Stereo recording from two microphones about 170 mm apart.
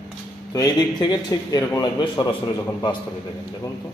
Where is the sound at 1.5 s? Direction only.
25° left (ahead or behind).